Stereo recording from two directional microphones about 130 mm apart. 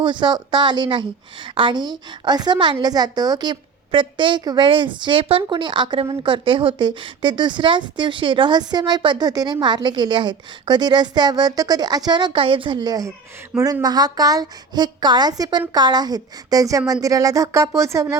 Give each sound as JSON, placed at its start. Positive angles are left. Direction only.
{"t": 0.0, "sound": "a woman's voice", "side_deg": -35}